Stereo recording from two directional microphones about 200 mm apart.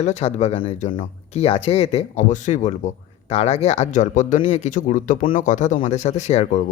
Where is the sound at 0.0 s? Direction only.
35° left (ahead or behind).